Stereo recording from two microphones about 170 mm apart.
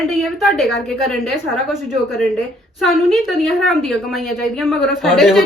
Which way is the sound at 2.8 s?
Centre (ahead or behind).